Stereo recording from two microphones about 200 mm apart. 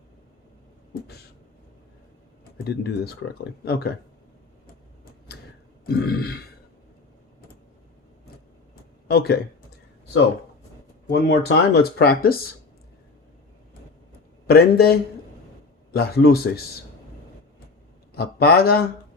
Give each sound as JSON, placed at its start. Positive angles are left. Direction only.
{"t": 2.6, "sound": "speech", "side_deg": 55}
{"t": 5.8, "sound": "speech", "side_deg": 50}
{"t": 9.0, "sound": "speech", "side_deg": 55}
{"t": 11.1, "sound": "speech", "side_deg": 55}
{"t": 14.4, "sound": "speech", "side_deg": 50}
{"t": 18.1, "sound": "speech", "side_deg": 50}